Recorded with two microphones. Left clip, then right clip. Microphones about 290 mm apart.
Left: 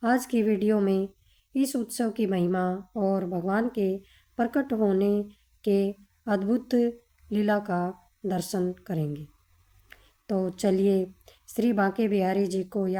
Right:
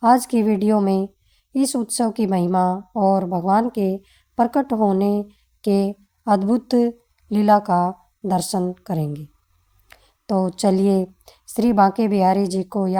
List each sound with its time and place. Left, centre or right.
0.0 s a woman's voice: right